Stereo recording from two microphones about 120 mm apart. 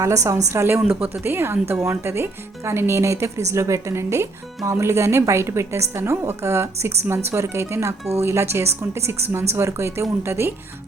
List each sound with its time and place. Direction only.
0.0 s speech: 25° right (ahead or behind)